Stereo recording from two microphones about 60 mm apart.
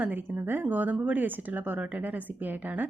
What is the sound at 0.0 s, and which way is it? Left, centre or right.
A woman's voice, right.